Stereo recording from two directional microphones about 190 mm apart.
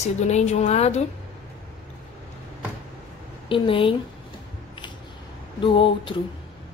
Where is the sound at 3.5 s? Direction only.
30° left (ahead or behind).